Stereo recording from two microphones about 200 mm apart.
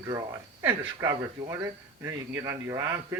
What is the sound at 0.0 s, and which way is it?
Speech, 20° right (ahead or behind).